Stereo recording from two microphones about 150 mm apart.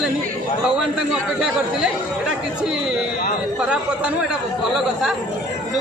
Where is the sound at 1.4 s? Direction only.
5° right (ahead or behind).